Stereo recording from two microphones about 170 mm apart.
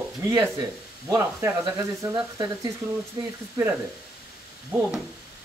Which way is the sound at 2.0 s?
25° right (ahead or behind).